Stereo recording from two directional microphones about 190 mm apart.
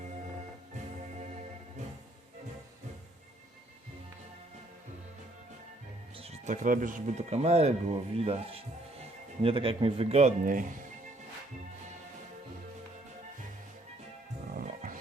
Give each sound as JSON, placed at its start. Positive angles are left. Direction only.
{"t": 6.1, "sound": "speech", "side_deg": -35}
{"t": 14.5, "sound": "music", "side_deg": -45}